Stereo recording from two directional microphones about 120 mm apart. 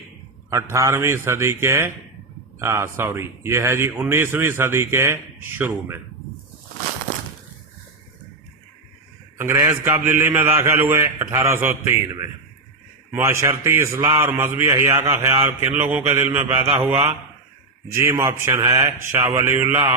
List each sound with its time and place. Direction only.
0.5 s a man's voice: 25° right (ahead or behind)
9.4 s a man's voice: 20° right (ahead or behind)
13.1 s a man's voice: 20° right (ahead or behind)
15.7 s mantra: 15° right (ahead or behind)
16.7 s a man's voice: 20° right (ahead or behind)